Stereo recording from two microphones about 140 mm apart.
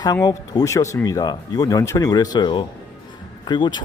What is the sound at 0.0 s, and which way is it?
Speech, 25° left (ahead or behind).